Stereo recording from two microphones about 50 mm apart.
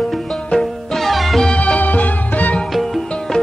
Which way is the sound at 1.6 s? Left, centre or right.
Left.